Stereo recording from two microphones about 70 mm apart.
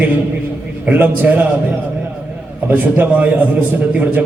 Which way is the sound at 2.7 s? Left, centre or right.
Right.